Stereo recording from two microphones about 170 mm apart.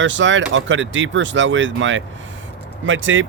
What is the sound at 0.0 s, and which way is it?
Speech, 90° right.